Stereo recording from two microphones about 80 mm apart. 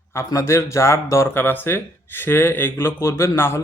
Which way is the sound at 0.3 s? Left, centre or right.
Left.